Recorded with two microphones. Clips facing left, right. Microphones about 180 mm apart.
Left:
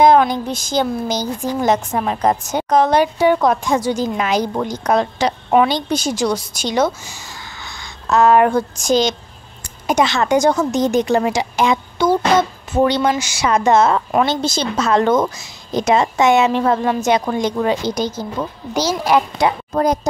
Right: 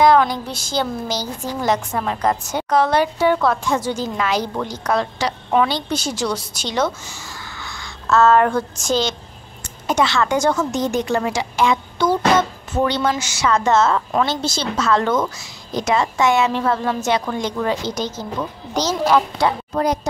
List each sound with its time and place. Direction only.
0.0 s a woman's voice: 20° left (ahead or behind)
19.7 s speech: 45° left (ahead or behind)